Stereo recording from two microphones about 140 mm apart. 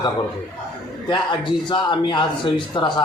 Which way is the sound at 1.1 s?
35° left (ahead or behind).